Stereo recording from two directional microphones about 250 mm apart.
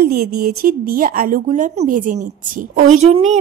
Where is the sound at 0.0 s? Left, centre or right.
Right.